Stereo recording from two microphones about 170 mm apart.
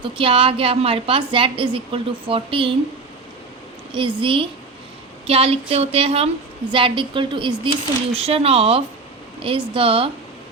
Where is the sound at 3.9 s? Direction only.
30° right (ahead or behind).